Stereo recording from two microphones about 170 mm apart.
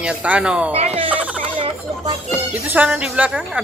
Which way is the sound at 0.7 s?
35° right (ahead or behind).